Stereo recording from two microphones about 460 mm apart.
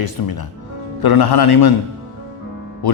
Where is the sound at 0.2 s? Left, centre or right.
Left.